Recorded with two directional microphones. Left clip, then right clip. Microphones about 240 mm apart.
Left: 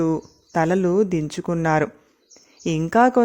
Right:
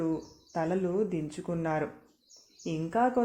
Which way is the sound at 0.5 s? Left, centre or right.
Left.